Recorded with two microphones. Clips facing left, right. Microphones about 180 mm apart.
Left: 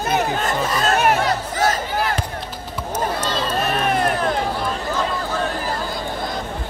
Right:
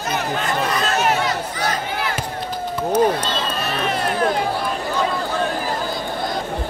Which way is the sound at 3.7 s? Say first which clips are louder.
Left 2 dB; 50° left (ahead or behind).